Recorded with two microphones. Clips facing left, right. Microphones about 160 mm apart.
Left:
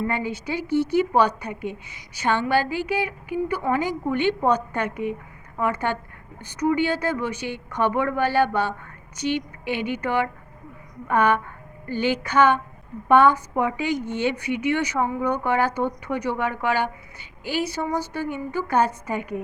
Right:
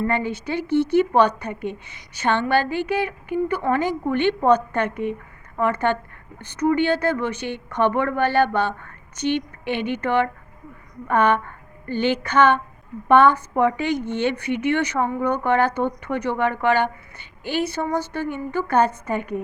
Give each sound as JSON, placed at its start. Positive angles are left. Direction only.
{"t": 0.0, "sound": "a woman's voice", "side_deg": 10}
{"t": 17.6, "sound": "speech", "side_deg": -55}
{"t": 17.8, "sound": "a woman's voice", "side_deg": 10}